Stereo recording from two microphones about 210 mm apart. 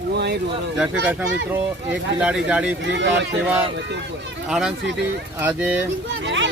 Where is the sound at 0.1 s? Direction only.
55° right (ahead or behind).